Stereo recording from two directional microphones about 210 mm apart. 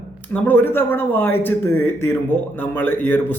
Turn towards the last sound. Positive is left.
turn(degrees=10)  # may be behind; listen again after turning